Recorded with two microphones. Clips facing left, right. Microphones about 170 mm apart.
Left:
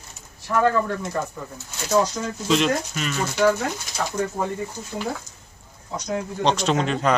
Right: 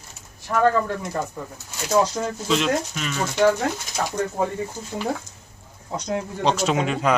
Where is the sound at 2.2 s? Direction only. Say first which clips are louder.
Right 2 dB; 40° right (ahead or behind).